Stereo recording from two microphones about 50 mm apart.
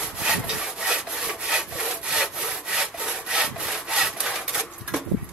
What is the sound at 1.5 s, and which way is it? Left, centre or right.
Sawing, centre.